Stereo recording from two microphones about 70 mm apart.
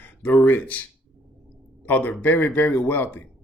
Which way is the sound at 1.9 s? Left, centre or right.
Left.